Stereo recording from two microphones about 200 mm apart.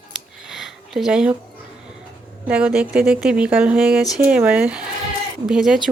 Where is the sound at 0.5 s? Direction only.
Centre (ahead or behind).